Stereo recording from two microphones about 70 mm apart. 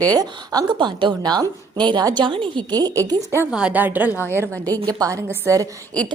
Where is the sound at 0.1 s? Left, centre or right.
Right.